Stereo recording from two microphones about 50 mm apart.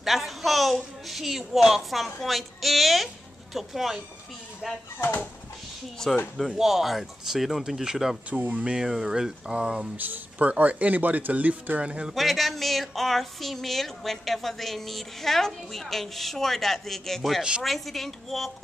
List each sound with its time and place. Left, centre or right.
0.0 s a woman's voice: centre
5.0 s speech: left
6.0 s speech: centre
6.5 s speech: centre
8.3 s speech: right
8.6 s speech: centre
9.9 s speech: right
12.1 s speech: centre
17.4 s speech: centre
17.6 s speech: centre